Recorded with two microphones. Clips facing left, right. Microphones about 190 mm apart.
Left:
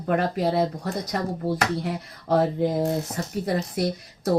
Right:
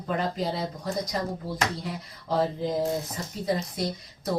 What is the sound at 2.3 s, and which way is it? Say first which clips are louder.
Speech: left 5 dB; 60° left (ahead or behind).